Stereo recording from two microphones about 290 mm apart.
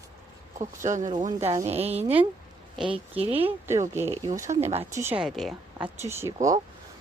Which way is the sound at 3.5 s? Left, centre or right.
Centre.